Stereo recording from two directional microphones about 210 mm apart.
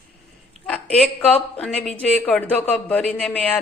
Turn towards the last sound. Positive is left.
turn(degrees=5)  # may be behind; listen again after turning